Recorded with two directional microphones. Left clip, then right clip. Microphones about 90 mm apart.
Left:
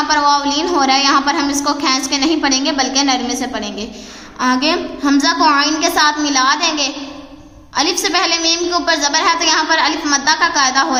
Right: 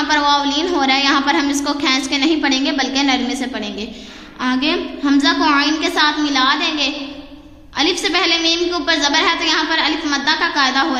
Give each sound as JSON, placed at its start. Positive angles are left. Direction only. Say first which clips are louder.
{"t": 0.1, "sound": "a woman's voice", "louder": "left 1 dB", "side_deg": 20}
{"t": 4.4, "sound": "a woman's voice", "louder": "left 3 dB", "side_deg": 35}
{"t": 8.0, "sound": "a woman's voice", "louder": "even", "side_deg": 40}